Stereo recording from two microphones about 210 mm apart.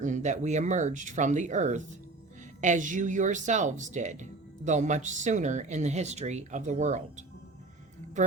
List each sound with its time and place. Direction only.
0.0 s speech: 35° right (ahead or behind)